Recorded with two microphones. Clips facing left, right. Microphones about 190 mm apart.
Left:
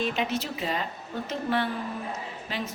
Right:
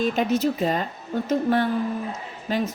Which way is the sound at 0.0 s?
45° right (ahead or behind).